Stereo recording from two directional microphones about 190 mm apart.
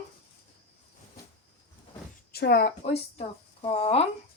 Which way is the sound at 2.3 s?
55° left (ahead or behind).